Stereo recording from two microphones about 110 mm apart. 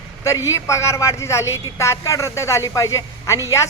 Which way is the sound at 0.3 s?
30° left (ahead or behind).